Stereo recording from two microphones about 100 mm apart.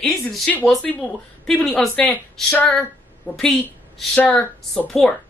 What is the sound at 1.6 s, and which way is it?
A woman's voice, 5° left (ahead or behind).